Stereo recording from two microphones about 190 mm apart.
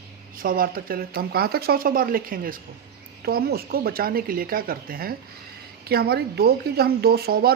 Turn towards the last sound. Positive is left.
turn(degrees=-55)  # may be behind; listen again after turning